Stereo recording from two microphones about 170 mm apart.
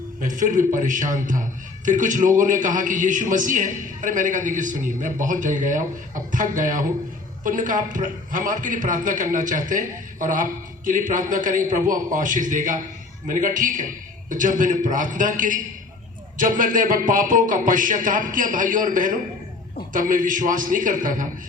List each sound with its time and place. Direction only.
0.2 s a man's voice: 50° right (ahead or behind)